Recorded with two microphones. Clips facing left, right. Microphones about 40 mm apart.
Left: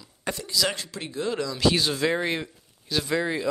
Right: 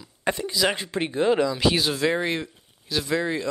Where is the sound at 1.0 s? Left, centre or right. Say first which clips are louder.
Right 11 dB; right.